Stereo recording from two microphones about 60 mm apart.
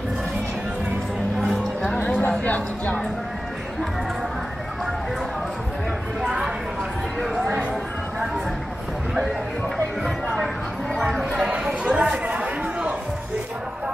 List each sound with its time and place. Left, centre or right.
2.2 s a sound: left
11.0 s chatter: centre
11.5 s chatter: centre